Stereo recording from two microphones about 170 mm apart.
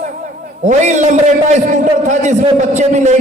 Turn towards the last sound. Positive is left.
turn(degrees=-45)  # may be behind; listen again after turning